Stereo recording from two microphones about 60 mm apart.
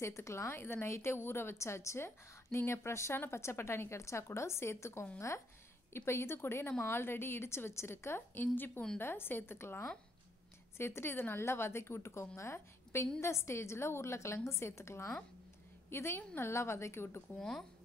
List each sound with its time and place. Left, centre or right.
0.0 s a woman's voice: left
17.4 s speech: centre